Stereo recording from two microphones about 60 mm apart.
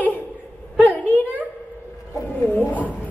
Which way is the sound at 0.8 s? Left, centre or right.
Left.